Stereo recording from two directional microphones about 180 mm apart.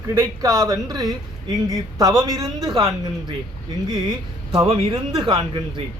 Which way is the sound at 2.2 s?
20° right (ahead or behind).